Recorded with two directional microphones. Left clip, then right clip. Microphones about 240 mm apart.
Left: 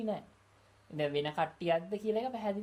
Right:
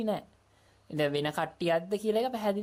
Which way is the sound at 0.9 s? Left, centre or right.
Right.